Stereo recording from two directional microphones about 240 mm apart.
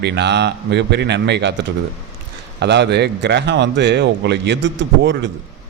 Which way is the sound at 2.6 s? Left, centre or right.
Right.